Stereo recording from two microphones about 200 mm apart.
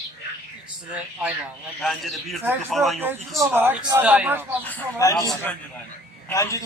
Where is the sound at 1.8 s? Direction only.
Centre (ahead or behind).